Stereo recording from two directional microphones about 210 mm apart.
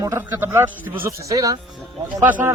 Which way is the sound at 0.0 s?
10° right (ahead or behind).